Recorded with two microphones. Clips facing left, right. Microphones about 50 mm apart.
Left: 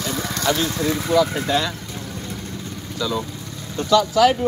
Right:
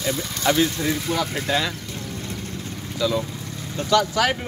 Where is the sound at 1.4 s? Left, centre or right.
Centre.